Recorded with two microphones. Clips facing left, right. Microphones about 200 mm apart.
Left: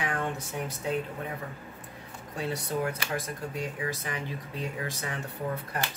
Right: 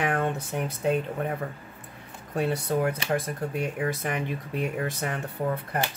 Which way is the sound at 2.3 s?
60° right (ahead or behind).